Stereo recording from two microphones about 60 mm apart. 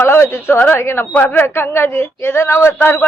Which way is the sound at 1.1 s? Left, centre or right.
Left.